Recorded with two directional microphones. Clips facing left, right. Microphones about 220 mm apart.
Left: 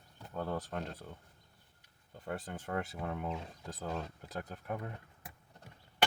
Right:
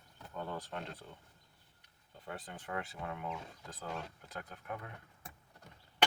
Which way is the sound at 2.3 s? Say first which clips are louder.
Left 4 dB; 45° left (ahead or behind).